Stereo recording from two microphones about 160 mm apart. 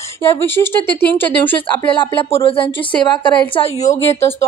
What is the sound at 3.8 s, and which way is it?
Speech, 20° left (ahead or behind).